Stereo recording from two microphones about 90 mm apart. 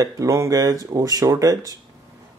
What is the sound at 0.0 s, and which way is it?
Speech, 35° right (ahead or behind).